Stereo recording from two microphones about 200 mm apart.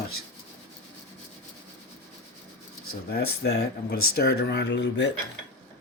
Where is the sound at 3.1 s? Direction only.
55° left (ahead or behind).